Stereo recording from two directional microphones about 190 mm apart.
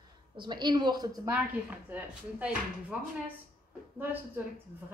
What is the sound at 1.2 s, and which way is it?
Speech, 10° right (ahead or behind).